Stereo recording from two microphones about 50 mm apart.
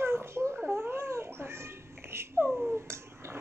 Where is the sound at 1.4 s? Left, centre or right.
Right.